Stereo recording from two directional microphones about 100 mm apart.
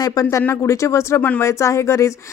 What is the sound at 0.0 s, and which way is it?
A woman's voice, 35° left (ahead or behind).